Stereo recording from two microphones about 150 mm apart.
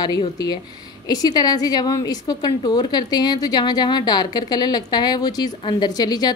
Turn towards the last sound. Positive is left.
turn(degrees=25)  # may be behind; listen again after turning